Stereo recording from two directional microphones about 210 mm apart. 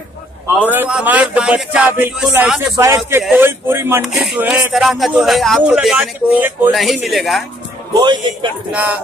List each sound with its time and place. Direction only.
0.7 s speech: 5° right (ahead or behind)
7.9 s a man's voice: 20° right (ahead or behind)
8.7 s speech: 5° right (ahead or behind)